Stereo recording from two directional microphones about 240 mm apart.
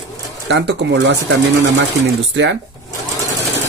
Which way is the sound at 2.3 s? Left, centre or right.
Right.